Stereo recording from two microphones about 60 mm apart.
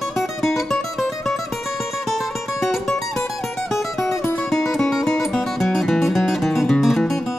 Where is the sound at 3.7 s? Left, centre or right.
Left.